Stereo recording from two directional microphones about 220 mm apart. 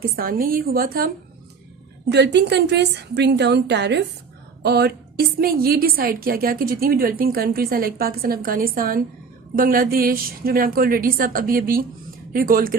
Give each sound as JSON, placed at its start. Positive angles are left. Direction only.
{"t": 0.0, "sound": "a woman's voice", "side_deg": -40}